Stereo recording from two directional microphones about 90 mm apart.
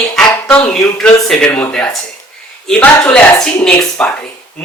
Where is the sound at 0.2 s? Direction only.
10° left (ahead or behind).